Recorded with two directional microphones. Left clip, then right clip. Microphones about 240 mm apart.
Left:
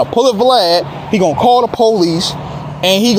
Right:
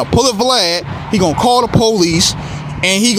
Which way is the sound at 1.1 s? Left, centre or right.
Centre.